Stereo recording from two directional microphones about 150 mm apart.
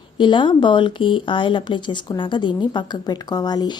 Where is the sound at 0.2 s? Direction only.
30° left (ahead or behind).